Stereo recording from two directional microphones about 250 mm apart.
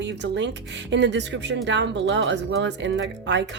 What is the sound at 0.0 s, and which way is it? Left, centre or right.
Speech, right.